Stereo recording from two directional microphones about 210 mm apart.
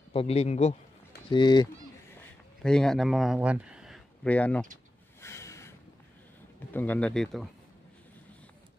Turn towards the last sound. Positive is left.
turn(degrees=0)  # may be behind; listen again after turning